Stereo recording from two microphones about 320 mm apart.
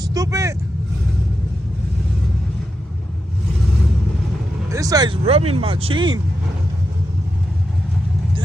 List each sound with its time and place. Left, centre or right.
0.0 s speech: centre
4.7 s speech: centre